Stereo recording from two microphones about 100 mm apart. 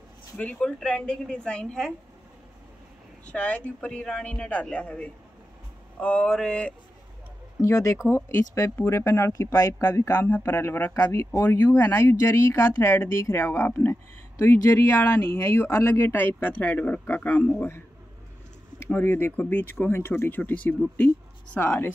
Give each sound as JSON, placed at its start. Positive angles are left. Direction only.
{"t": 0.4, "sound": "a man's voice", "side_deg": 10}
{"t": 3.3, "sound": "a man's voice", "side_deg": 10}
{"t": 7.6, "sound": "a man's voice", "side_deg": 30}